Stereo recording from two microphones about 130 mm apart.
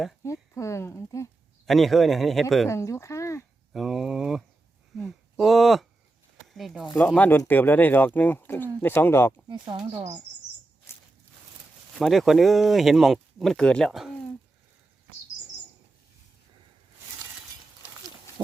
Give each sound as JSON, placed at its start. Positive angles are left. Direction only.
{"t": 0.2, "sound": "speech", "side_deg": 25}
{"t": 1.6, "sound": "speech", "side_deg": 0}
{"t": 2.6, "sound": "speech", "side_deg": 25}
{"t": 3.7, "sound": "a sound", "side_deg": 0}
{"t": 7.2, "sound": "speech", "side_deg": 15}
{"t": 9.5, "sound": "speech", "side_deg": -35}
{"t": 11.9, "sound": "speech", "side_deg": 0}